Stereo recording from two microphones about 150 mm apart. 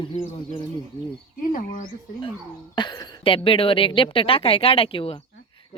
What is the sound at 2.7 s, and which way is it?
A woman's voice, 30° left (ahead or behind).